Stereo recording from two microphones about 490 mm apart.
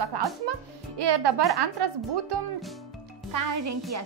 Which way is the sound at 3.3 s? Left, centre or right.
Right.